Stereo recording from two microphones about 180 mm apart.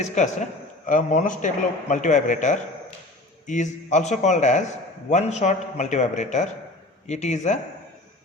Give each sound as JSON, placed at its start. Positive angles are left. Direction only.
{"t": 0.0, "sound": "a man's voice", "side_deg": 40}